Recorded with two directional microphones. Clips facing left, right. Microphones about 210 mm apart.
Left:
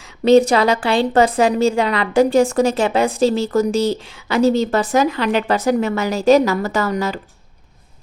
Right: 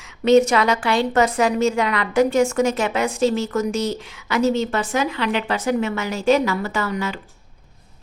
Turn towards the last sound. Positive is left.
turn(degrees=40)  # may be behind; listen again after turning